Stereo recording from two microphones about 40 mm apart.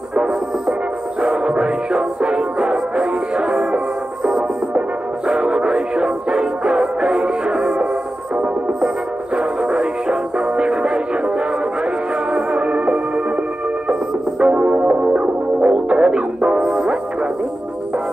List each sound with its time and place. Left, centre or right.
0.1 s music: right
8.8 s music: right
12.4 s music: right
14.4 s music: right